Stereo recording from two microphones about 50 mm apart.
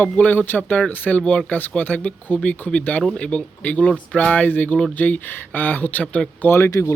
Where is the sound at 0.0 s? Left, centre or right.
Left.